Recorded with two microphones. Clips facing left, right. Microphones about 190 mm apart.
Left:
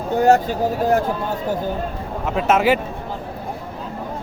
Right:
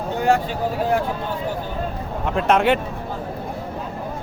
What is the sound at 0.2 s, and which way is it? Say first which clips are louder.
Speech: left 5 dB; 40° left (ahead or behind).